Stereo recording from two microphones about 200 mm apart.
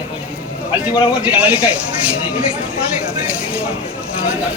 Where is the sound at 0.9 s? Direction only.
5° right (ahead or behind).